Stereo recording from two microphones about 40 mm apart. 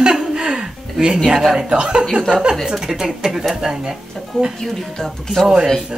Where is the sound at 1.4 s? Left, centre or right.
Centre.